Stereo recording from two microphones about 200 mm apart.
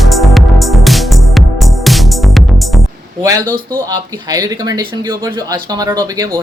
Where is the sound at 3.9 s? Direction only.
20° right (ahead or behind).